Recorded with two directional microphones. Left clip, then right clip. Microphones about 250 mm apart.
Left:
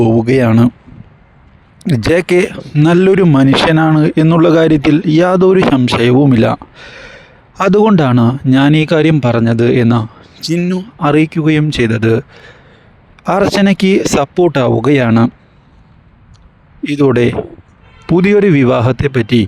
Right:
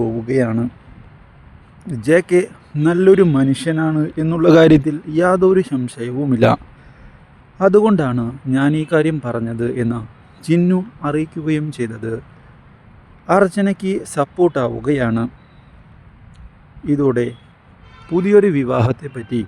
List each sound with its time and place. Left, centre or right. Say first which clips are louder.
0.0 s speech: left 8 dB; left
1.9 s speech: left 3 dB; left
4.4 s a man's voice: right 2 dB; centre
4.9 s speech: left 6 dB; left
13.2 s speech: left 3 dB; left
16.8 s speech: left 6 dB; left